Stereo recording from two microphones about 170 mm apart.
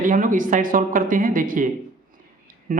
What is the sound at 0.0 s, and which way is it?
Speech, 50° right (ahead or behind).